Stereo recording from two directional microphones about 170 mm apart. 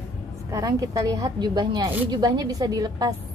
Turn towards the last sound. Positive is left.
turn(degrees=-20)  # may be behind; listen again after turning